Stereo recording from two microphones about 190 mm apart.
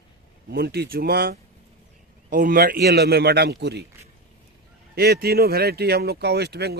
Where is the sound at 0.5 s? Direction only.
60° right (ahead or behind).